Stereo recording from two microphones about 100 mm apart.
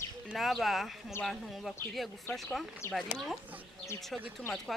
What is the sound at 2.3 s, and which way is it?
Speech, 25° left (ahead or behind).